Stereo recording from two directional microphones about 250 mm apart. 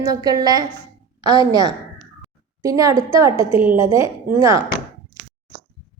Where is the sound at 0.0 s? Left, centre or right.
Centre.